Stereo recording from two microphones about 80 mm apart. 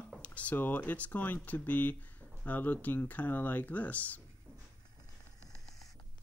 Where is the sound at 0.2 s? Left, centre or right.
Centre.